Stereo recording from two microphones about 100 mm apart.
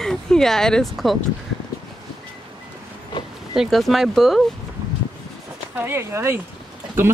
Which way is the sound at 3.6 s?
Centre (ahead or behind).